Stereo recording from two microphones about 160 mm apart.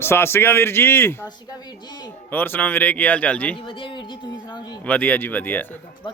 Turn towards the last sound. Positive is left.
turn(degrees=10)  # may be behind; listen again after turning